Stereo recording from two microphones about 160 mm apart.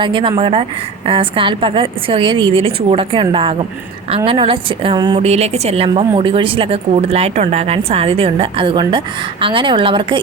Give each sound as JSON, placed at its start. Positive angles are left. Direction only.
{"t": 0.0, "sound": "speech", "side_deg": -30}
{"t": 5.2, "sound": "speech", "side_deg": -40}